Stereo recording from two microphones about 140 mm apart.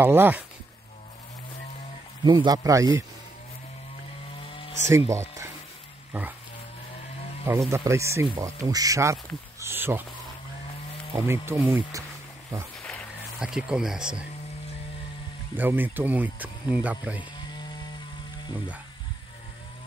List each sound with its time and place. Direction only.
0.0 s speech: 15° right (ahead or behind)
2.2 s speech: 30° right (ahead or behind)
4.5 s a sound: 40° left (ahead or behind)
4.8 s speech: 20° right (ahead or behind)
7.7 s speech: 20° right (ahead or behind)
9.6 s insect: 15° right (ahead or behind)
11.1 s speech: 15° right (ahead or behind)
13.4 s speech: 5° right (ahead or behind)
15.5 s speech: 15° right (ahead or behind)